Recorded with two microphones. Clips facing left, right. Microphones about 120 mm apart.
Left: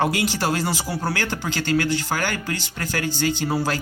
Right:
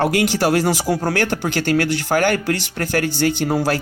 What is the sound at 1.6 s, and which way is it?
Speech, 55° right (ahead or behind).